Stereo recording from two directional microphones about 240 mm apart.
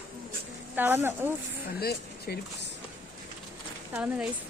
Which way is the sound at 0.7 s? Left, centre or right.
Centre.